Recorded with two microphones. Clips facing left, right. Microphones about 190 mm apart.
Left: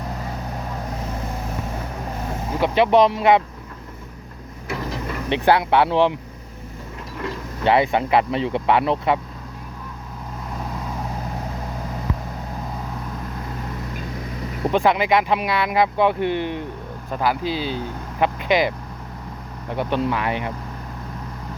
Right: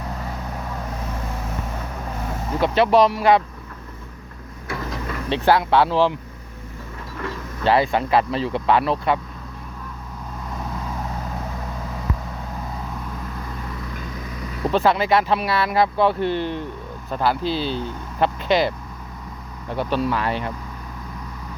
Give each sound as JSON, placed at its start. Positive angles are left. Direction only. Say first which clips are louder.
{"t": 2.5, "sound": "speech", "louder": "even", "side_deg": 15}
{"t": 5.3, "sound": "speech", "louder": "even", "side_deg": 20}
{"t": 7.6, "sound": "speech", "louder": "left 1 dB", "side_deg": 20}
{"t": 14.6, "sound": "speech", "louder": "even", "side_deg": 15}
{"t": 19.7, "sound": "speech", "louder": "even", "side_deg": 20}